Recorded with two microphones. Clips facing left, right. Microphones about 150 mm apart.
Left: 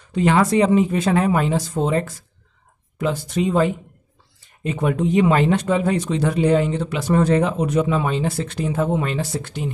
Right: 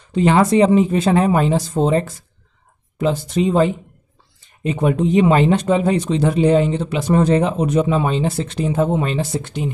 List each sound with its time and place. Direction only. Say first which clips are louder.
0.1 s speech: right 3 dB; 25° right (ahead or behind)